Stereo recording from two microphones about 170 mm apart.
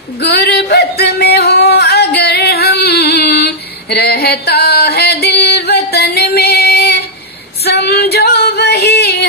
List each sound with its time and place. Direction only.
0.2 s singing: 70° left (ahead or behind)
7.6 s female singing: 70° left (ahead or behind)